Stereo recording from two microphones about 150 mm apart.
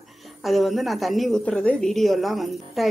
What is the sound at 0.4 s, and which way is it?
A woman's voice, centre (ahead or behind).